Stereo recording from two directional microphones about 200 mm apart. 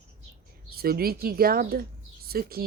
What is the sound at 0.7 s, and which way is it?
Speech, 50° right (ahead or behind).